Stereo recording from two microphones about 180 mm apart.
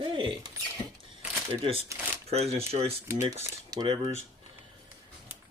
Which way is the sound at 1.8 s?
10° right (ahead or behind).